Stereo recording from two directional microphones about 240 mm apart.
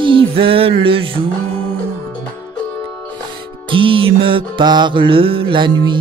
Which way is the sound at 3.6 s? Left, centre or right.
Right.